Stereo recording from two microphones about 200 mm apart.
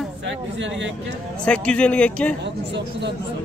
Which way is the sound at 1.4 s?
5° left (ahead or behind).